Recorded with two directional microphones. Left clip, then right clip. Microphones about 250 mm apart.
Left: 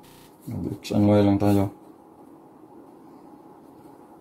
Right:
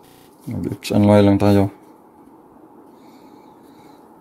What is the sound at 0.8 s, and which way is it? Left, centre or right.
Speech, right.